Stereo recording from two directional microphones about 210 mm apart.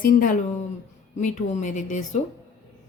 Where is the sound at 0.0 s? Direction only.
40° left (ahead or behind).